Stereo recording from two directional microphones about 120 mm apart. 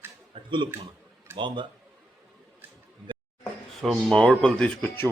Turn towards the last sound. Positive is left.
turn(degrees=10)  # may be behind; listen again after turning